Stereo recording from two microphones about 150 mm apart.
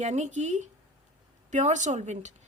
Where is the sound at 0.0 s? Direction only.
50° right (ahead or behind).